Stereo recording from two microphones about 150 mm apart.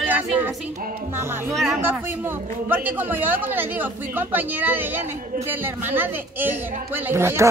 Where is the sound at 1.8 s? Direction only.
15° right (ahead or behind).